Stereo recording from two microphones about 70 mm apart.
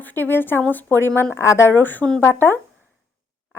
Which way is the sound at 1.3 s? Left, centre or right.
Left.